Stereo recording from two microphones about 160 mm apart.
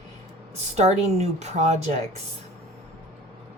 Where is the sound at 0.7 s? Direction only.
45° right (ahead or behind).